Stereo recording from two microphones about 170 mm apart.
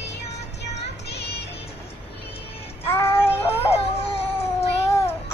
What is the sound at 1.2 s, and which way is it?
Music, 75° left (ahead or behind).